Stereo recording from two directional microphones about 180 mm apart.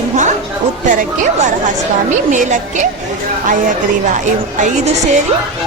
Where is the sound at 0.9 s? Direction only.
45° right (ahead or behind).